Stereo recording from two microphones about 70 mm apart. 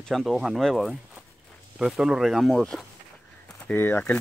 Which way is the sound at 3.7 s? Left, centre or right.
Left.